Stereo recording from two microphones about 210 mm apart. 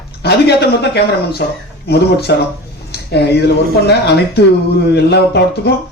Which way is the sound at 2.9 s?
50° left (ahead or behind).